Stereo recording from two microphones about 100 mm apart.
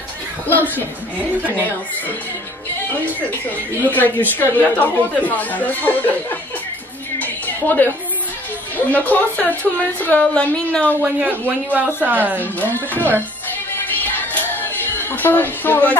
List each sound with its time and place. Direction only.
0.5 s speech: 20° left (ahead or behind)
3.4 s a woman's voice: 20° left (ahead or behind)
7.2 s music: 15° left (ahead or behind)
8.7 s a woman's voice: 15° left (ahead or behind)
11.0 s speech: 15° right (ahead or behind)
12.5 s a woman's voice: 15° left (ahead or behind)
14.1 s music: 20° left (ahead or behind)